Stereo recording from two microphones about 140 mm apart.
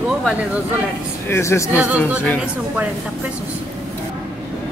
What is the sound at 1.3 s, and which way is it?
Speech, 20° left (ahead or behind).